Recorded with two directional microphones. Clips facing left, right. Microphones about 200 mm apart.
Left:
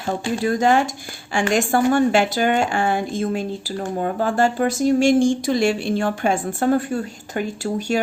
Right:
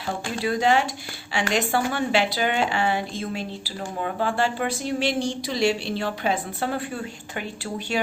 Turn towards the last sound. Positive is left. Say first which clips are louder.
# left 7 dB
turn(degrees=45)  # may be behind; listen again after turning